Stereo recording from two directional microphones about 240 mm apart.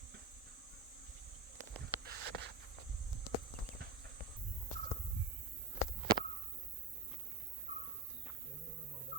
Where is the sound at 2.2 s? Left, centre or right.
Right.